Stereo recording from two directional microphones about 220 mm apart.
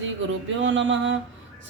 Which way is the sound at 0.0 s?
60° right (ahead or behind).